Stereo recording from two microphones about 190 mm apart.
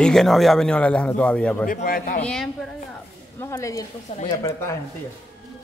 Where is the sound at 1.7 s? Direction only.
50° left (ahead or behind).